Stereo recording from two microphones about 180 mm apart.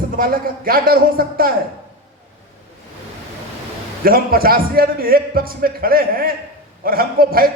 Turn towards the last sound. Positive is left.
turn(degrees=-55)  # may be behind; listen again after turning